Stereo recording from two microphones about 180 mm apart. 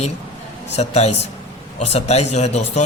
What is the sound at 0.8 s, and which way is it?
Speech, 35° left (ahead or behind).